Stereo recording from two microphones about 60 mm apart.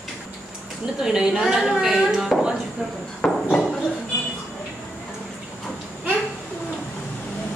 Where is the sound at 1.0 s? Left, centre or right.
Centre.